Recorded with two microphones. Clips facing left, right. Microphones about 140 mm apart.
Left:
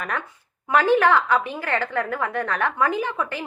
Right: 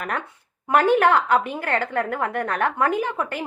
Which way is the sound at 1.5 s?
50° right (ahead or behind).